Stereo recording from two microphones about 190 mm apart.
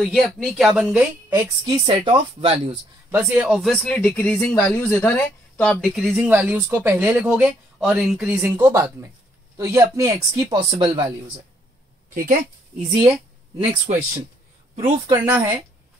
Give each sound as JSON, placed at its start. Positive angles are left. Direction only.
{"t": 0.0, "sound": "speech", "side_deg": 0}
{"t": 1.7, "sound": "speech", "side_deg": -25}
{"t": 3.1, "sound": "speech", "side_deg": -10}
{"t": 10.5, "sound": "speech", "side_deg": -25}
{"t": 12.1, "sound": "speech", "side_deg": -45}
{"t": 14.8, "sound": "speech", "side_deg": -30}
{"t": 15.1, "sound": "speech", "side_deg": -10}